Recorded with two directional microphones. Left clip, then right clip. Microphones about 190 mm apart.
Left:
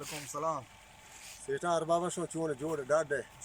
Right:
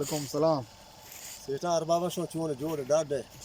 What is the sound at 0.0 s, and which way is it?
Speech, 25° right (ahead or behind).